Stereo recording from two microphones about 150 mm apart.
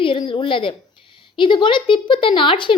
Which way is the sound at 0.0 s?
35° left (ahead or behind).